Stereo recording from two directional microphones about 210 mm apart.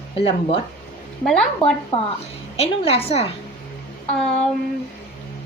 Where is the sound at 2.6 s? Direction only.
25° left (ahead or behind).